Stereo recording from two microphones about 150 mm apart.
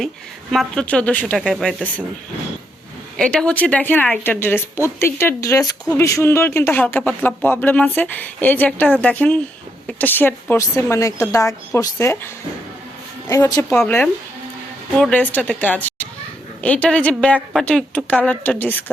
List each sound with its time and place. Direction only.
0.5 s speech: 5° left (ahead or behind)
3.2 s speech: 5° left (ahead or behind)
15.1 s speech: 10° left (ahead or behind)